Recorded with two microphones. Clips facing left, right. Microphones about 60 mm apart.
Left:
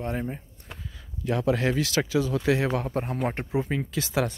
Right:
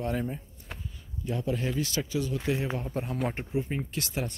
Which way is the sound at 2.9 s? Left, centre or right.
Left.